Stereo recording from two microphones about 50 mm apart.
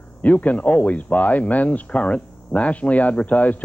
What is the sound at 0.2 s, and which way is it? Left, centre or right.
Speech, left.